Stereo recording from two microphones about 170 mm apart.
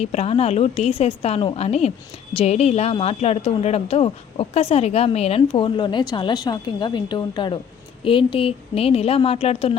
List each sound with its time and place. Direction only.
0.0 s speech: 40° left (ahead or behind)